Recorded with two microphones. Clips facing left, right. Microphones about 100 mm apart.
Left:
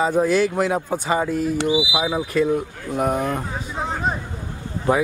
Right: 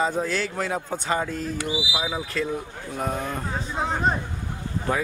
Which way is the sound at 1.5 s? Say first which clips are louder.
Left 7 dB; 20° left (ahead or behind).